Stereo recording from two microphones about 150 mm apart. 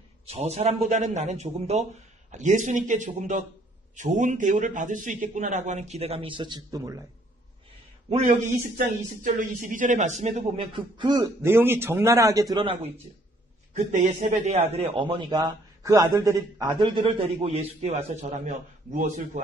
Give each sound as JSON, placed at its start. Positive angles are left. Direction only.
{"t": 0.3, "sound": "a man's voice", "side_deg": -45}
{"t": 8.1, "sound": "a man's voice", "side_deg": -55}
{"t": 11.4, "sound": "a man's voice", "side_deg": -15}
{"t": 13.7, "sound": "a man's voice", "side_deg": -50}
{"t": 17.4, "sound": "a man's voice", "side_deg": -45}